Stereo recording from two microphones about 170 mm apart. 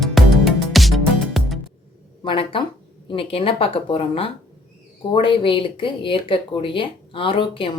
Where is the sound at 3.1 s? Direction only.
35° left (ahead or behind).